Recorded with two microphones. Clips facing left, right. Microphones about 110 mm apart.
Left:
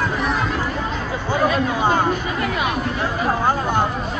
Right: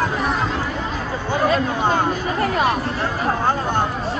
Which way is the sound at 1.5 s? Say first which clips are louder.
Even; 10° left (ahead or behind).